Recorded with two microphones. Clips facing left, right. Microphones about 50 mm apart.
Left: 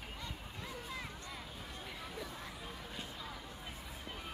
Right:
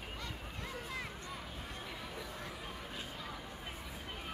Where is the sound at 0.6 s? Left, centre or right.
Right.